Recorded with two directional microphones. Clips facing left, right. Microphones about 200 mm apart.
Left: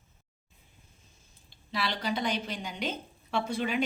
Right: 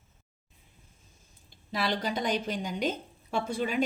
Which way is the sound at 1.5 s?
45° right (ahead or behind).